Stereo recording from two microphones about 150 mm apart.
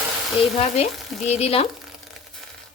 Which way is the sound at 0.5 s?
45° left (ahead or behind).